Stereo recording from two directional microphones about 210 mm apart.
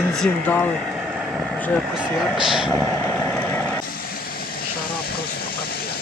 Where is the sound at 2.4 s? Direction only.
Centre (ahead or behind).